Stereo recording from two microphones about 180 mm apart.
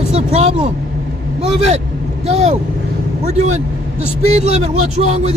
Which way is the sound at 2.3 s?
35° right (ahead or behind).